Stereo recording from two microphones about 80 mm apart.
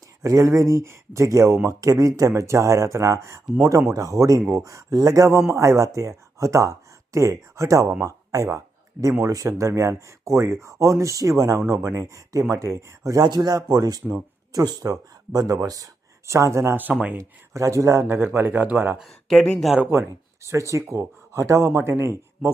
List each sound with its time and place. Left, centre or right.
0.2 s speech: right
13.2 s speech: right
16.7 s speech: right
17.2 s speech: right
18.9 s speech: centre
19.9 s speech: right
22.4 s speech: centre